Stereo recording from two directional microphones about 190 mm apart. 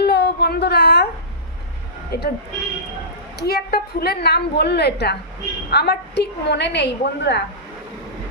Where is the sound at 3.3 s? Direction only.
55° left (ahead or behind).